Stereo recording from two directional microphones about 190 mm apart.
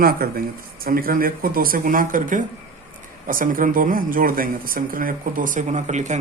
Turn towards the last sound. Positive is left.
turn(degrees=-40)  # may be behind; listen again after turning